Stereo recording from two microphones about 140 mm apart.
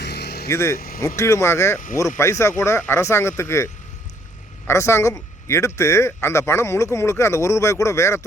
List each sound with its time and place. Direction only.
0.4 s a man's voice: 20° left (ahead or behind)
0.8 s speech: 90° left
1.0 s a man's voice: 20° left (ahead or behind)